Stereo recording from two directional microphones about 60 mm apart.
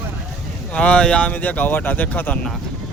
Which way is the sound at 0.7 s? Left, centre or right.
Centre.